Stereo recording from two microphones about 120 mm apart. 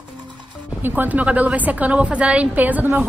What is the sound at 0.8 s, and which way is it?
A woman's voice, 15° right (ahead or behind).